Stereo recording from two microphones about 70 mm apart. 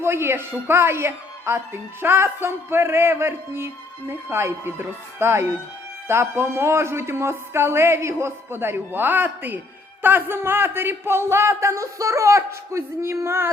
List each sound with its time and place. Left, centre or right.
0.0 s speech: right